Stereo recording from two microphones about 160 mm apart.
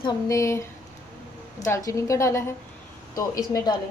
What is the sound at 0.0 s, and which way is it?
A woman's voice, 20° left (ahead or behind).